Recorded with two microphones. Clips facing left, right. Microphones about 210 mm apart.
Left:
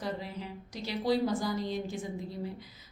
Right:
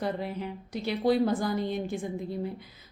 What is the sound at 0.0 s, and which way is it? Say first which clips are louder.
A woman's voice: right 5 dB; 55° right (ahead or behind).